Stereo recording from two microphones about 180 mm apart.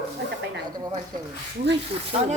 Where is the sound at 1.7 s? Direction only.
70° right (ahead or behind).